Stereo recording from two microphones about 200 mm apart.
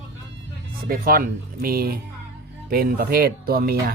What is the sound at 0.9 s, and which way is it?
Speech, 50° right (ahead or behind).